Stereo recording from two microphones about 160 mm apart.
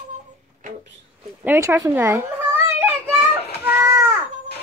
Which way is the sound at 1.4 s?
15° right (ahead or behind).